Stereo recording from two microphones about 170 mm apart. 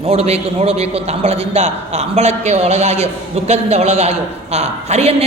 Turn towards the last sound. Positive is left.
turn(degrees=-40)  # may be behind; listen again after turning